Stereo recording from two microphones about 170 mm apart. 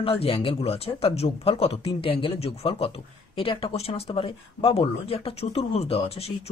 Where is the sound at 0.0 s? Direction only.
35° left (ahead or behind).